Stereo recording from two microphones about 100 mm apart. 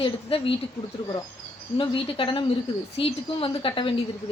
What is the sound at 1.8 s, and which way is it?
Speech, 60° left (ahead or behind).